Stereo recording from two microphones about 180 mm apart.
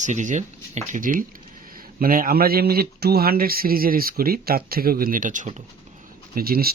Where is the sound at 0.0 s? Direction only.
40° right (ahead or behind).